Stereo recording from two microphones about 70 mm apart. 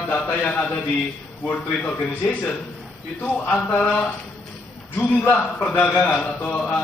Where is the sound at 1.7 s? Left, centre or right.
Left.